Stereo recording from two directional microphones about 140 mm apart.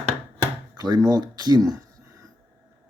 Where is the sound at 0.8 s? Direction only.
30° right (ahead or behind).